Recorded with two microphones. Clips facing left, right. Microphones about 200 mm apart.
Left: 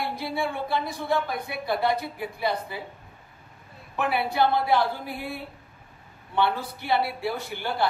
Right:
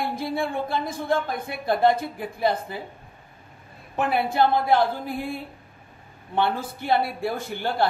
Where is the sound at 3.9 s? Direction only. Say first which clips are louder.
Right 3 dB; 50° right (ahead or behind).